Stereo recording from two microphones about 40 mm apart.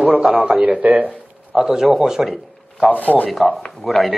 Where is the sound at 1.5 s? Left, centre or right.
Centre.